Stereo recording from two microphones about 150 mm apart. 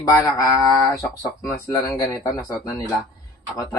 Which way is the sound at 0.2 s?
20° left (ahead or behind).